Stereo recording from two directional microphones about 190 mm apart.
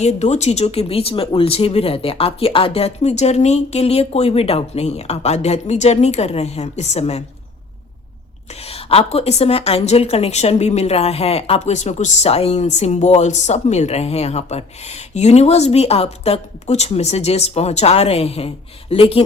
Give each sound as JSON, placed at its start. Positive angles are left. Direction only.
{"t": 0.0, "sound": "a woman's voice", "side_deg": 35}
{"t": 8.6, "sound": "a woman's voice", "side_deg": 30}